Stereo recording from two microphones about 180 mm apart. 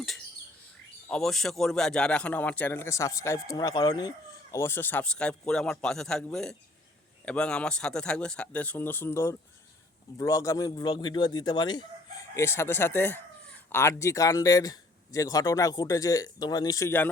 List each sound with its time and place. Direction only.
1.0 s a man's voice: 5° left (ahead or behind)